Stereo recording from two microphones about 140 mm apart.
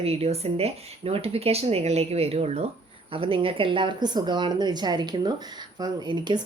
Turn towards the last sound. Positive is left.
turn(degrees=-30)  # may be behind; listen again after turning